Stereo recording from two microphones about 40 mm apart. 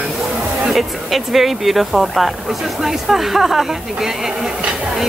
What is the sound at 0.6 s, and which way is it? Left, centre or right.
Speech, centre.